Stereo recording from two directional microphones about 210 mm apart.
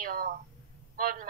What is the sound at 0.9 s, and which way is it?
Speech, 40° right (ahead or behind).